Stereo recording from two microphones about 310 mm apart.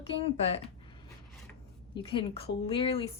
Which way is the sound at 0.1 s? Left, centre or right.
Centre.